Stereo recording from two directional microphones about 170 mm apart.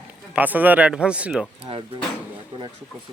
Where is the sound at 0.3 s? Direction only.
10° right (ahead or behind).